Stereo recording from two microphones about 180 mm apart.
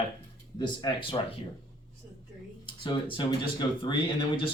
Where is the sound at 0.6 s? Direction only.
25° left (ahead or behind).